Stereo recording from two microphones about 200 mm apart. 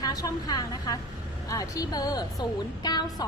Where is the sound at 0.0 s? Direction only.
20° left (ahead or behind).